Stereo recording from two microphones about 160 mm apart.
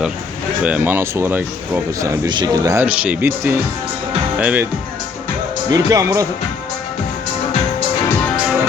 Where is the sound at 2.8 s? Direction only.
10° right (ahead or behind).